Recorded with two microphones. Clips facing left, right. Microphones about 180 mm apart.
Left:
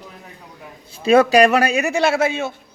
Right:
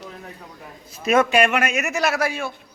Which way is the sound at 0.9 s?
30° left (ahead or behind).